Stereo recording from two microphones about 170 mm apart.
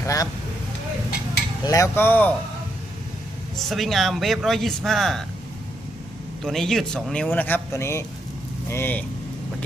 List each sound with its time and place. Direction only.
0.0 s speech: 20° left (ahead or behind)
1.6 s a man's voice: 20° left (ahead or behind)
3.6 s speech: centre (ahead or behind)
6.4 s a man's voice: centre (ahead or behind)